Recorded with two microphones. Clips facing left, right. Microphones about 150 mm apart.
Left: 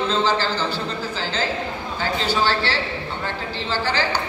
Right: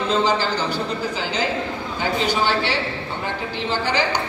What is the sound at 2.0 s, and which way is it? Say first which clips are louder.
Speech: right 1 dB; 15° right (ahead or behind).